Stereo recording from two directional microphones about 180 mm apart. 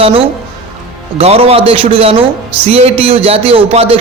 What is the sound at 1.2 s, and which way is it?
A man's voice, 35° right (ahead or behind).